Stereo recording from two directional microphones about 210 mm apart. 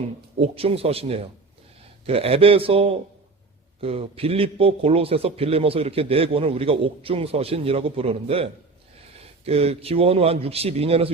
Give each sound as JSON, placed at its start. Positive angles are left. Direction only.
{"t": 0.3, "sound": "a man's voice", "side_deg": -25}